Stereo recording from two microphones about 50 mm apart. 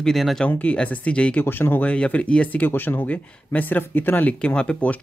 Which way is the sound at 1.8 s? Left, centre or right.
Left.